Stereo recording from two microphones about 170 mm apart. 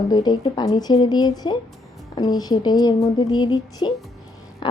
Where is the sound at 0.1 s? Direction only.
25° left (ahead or behind).